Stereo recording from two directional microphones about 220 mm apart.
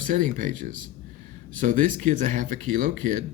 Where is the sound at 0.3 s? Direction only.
35° right (ahead or behind).